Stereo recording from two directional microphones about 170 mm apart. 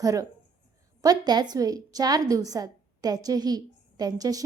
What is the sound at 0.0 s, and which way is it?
A woman's voice, 20° right (ahead or behind).